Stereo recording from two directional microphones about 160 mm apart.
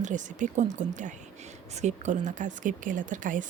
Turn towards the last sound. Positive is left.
turn(degrees=-55)  # may be behind; listen again after turning